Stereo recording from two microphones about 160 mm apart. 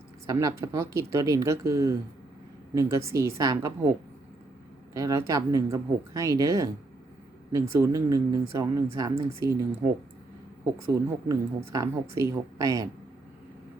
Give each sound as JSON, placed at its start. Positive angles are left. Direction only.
{"t": 0.3, "sound": "a woman's voice", "side_deg": -20}
{"t": 4.9, "sound": "a woman's voice", "side_deg": -20}
{"t": 10.8, "sound": "a woman's voice", "side_deg": -20}